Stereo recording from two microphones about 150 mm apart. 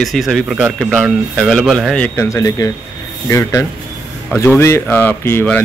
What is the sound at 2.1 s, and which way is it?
Speech, 20° left (ahead or behind).